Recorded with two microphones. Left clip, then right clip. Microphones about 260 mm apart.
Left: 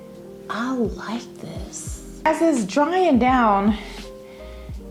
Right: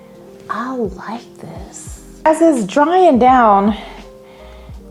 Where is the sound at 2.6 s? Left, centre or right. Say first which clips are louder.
Right 8 dB; right.